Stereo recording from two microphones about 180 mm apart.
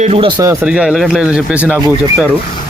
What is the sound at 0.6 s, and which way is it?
Speech, 5° right (ahead or behind).